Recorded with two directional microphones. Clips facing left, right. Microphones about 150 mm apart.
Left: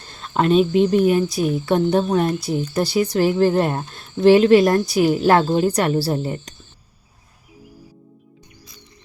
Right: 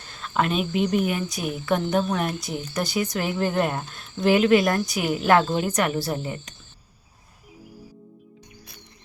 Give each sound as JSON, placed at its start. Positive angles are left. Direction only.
{"t": 0.1, "sound": "speech", "side_deg": 35}